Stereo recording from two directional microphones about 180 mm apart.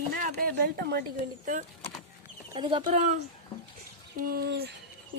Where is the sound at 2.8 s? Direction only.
45° right (ahead or behind).